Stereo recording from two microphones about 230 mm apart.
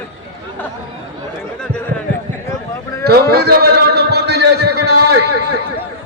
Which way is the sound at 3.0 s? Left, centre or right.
Right.